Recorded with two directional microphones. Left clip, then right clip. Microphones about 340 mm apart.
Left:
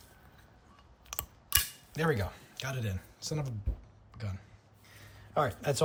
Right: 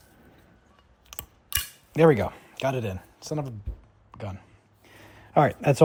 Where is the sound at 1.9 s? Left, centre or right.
Centre.